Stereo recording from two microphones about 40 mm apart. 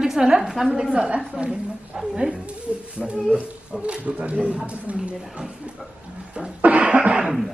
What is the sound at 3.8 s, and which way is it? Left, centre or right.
Speech, right.